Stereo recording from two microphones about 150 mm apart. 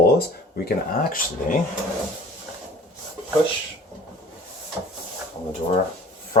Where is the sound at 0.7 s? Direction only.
70° left (ahead or behind).